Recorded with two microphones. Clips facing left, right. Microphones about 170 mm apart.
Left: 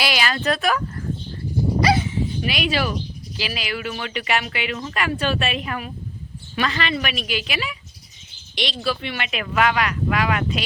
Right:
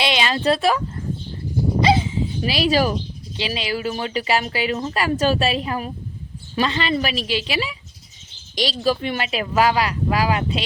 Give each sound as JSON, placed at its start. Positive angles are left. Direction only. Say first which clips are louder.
{"t": 0.0, "sound": "speech", "louder": "right 3 dB", "side_deg": -25}
{"t": 1.8, "sound": "dog", "louder": "right 2 dB", "side_deg": -25}
{"t": 3.3, "sound": "a woman's voice", "louder": "right 4 dB", "side_deg": -30}